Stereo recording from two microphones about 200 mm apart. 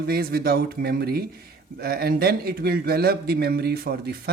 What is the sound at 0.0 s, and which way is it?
Speech, 50° right (ahead or behind).